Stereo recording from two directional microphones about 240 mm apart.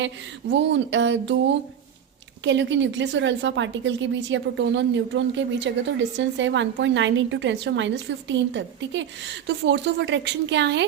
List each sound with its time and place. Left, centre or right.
0.5 s a woman's voice: right
2.4 s a woman's voice: right